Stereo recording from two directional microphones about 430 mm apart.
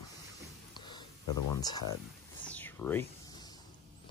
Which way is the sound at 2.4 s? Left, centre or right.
Centre.